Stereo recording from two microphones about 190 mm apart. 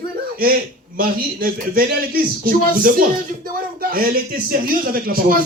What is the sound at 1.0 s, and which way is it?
A man's voice, 50° right (ahead or behind).